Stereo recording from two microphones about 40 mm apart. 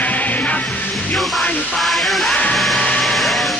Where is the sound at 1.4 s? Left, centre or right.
Left.